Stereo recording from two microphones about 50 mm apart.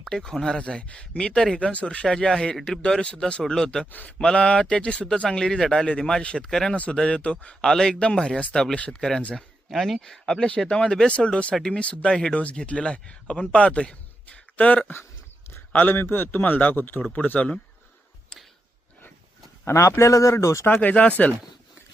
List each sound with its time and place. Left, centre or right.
0.2 s speech: centre
0.6 s speech: left
2.0 s speech: centre
6.7 s speech: left
9.0 s speech: centre
10.1 s speech: centre
15.7 s a man's voice: left
17.0 s a man's voice: left
19.6 s speech: left
20.8 s speech: left